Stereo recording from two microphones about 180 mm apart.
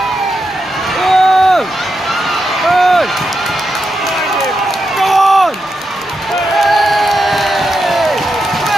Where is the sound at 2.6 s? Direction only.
Centre (ahead or behind).